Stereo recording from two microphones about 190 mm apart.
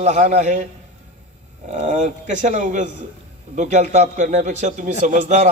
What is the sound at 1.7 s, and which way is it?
A man's voice, 40° right (ahead or behind).